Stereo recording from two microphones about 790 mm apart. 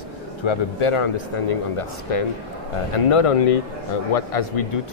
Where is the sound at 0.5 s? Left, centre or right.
Left.